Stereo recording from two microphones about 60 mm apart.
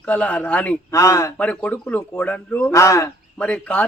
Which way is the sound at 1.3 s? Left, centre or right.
Left.